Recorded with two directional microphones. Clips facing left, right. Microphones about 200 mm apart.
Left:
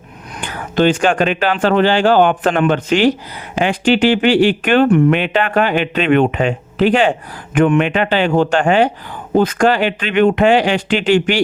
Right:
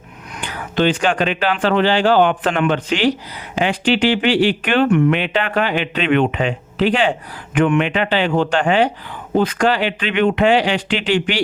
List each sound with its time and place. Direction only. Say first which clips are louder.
0.4 s speech: left 3 dB; 45° left (ahead or behind)
5.1 s speech: left 3 dB; 50° left (ahead or behind)